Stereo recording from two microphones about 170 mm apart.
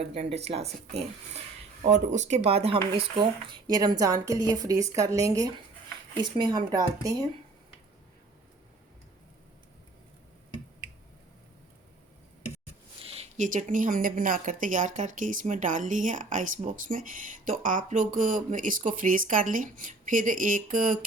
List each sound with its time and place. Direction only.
0.0 s a woman's voice: 35° right (ahead or behind); by 7.3 s 20° right (ahead or behind)
13.0 s a woman's voice: 35° right (ahead or behind); by 21.0 s 55° right (ahead or behind)